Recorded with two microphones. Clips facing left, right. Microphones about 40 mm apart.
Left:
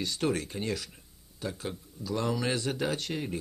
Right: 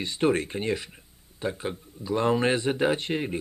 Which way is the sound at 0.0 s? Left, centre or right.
Right.